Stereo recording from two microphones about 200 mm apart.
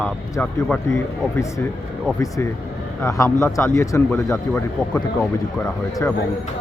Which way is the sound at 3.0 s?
15° left (ahead or behind).